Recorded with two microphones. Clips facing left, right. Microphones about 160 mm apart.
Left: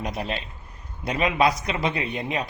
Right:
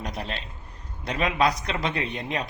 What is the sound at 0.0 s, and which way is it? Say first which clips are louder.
A man's voice: left 4 dB; 10° left (ahead or behind).